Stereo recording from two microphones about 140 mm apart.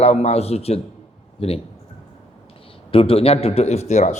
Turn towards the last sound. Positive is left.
turn(degrees=55)  # may be behind; listen again after turning